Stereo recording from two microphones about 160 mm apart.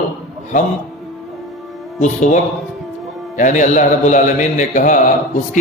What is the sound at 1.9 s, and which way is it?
Speech, 50° left (ahead or behind).